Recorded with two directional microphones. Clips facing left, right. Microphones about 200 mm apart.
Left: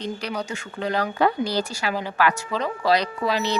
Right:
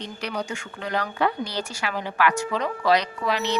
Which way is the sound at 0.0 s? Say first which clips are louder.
Left 2 dB; 35° left (ahead or behind).